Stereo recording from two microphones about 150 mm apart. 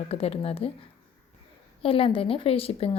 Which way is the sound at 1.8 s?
40° left (ahead or behind).